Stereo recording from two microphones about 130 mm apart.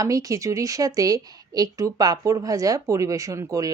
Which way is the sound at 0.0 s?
25° right (ahead or behind).